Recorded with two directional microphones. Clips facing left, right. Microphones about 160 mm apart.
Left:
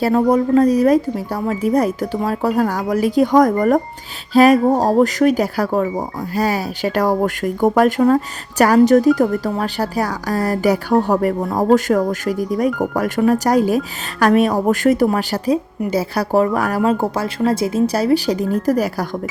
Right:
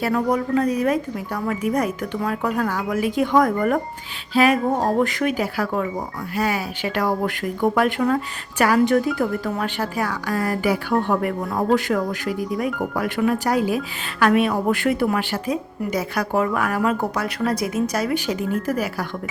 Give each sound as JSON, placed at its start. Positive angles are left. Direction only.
{"t": 0.0, "sound": "speech", "side_deg": 30}